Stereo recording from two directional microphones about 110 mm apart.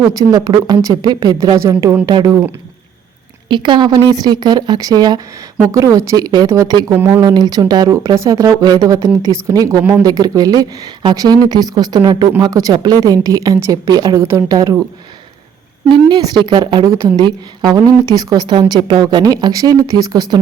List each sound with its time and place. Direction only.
0.2 s a woman's voice: 35° right (ahead or behind)
2.0 s a woman's voice: 40° right (ahead or behind)
3.5 s a woman's voice: 45° right (ahead or behind)
6.9 s speech: 20° right (ahead or behind)
7.2 s a woman's voice: 40° right (ahead or behind)
15.9 s a woman's voice: 45° right (ahead or behind)